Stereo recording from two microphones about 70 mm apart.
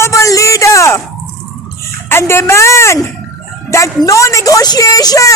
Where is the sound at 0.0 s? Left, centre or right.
Left.